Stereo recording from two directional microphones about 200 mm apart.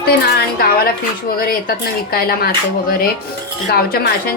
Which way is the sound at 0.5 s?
50° left (ahead or behind).